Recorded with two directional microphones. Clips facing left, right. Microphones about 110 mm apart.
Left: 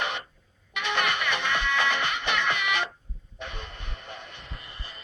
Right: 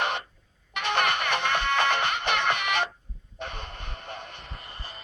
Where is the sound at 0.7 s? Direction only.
45° right (ahead or behind).